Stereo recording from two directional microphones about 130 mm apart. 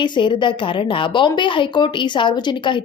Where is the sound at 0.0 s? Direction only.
35° left (ahead or behind).